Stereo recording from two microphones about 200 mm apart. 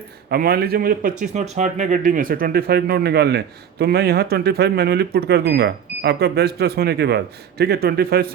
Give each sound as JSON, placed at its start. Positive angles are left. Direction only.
{"t": 0.3, "sound": "speech", "side_deg": -50}